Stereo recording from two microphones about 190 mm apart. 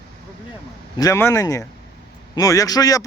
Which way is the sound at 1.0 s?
15° left (ahead or behind).